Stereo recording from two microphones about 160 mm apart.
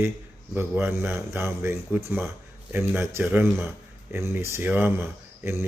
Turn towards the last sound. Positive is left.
turn(degrees=-15)  # may be behind; listen again after turning